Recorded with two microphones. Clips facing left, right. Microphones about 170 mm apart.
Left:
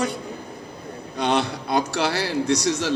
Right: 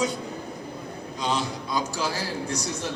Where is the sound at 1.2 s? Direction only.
65° left (ahead or behind); by 2.9 s 85° left.